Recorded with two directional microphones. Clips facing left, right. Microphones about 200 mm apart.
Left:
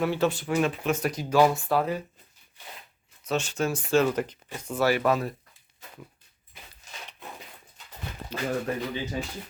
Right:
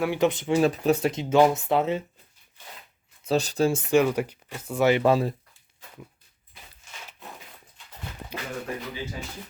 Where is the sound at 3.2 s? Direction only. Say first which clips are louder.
Right 5 dB; 35° right (ahead or behind).